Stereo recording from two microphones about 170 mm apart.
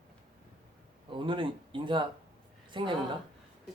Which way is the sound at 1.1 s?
30° right (ahead or behind).